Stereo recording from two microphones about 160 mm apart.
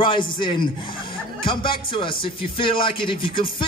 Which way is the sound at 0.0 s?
30° left (ahead or behind).